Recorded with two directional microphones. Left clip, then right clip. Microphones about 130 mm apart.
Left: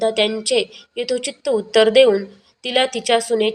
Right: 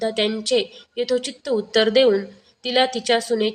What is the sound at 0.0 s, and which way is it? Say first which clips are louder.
A woman's voice: left 4 dB; 35° left (ahead or behind).